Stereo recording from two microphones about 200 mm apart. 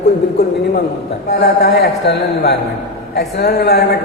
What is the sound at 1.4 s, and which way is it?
A man's voice, 55° left (ahead or behind).